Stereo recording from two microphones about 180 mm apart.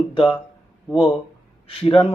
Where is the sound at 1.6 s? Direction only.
30° left (ahead or behind).